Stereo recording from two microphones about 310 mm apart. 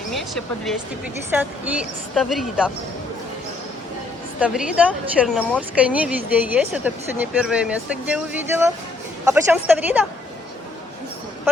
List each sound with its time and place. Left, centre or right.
0.1 s a woman's voice: centre
4.4 s a woman's voice: centre